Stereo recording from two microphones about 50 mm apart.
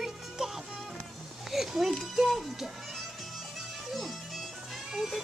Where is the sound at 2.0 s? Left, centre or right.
Centre.